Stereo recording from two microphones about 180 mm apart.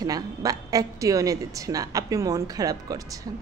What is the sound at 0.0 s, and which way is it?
A woman's voice, 20° right (ahead or behind).